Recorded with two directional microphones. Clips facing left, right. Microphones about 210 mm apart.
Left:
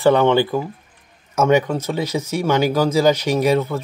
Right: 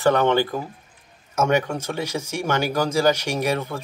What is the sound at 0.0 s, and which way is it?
Speech, 15° left (ahead or behind).